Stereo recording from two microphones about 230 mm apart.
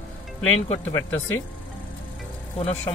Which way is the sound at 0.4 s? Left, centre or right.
Centre.